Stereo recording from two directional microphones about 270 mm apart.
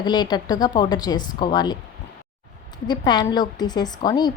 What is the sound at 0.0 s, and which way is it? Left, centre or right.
A woman's voice, centre.